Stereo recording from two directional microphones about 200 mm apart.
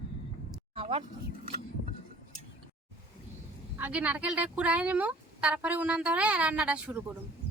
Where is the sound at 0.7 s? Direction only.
30° right (ahead or behind).